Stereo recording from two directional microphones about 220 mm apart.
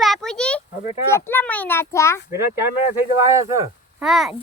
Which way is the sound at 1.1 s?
10° left (ahead or behind).